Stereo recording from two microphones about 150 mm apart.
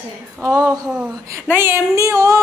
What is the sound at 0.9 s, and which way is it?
Speech, 5° right (ahead or behind).